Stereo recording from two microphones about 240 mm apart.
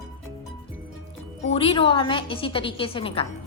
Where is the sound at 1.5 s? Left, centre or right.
Left.